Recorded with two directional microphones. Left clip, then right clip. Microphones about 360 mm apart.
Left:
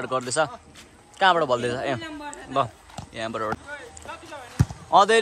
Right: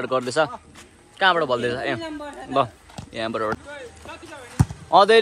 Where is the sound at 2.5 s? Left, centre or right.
Centre.